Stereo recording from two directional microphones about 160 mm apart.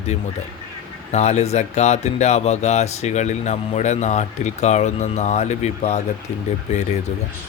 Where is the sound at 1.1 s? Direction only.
45° left (ahead or behind).